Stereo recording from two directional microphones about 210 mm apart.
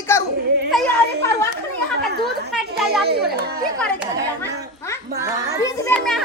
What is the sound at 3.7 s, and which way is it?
Speech, 5° left (ahead or behind).